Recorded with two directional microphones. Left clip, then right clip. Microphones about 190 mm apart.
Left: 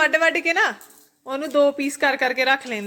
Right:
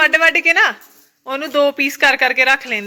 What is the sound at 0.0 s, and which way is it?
A woman's voice, 10° left (ahead or behind).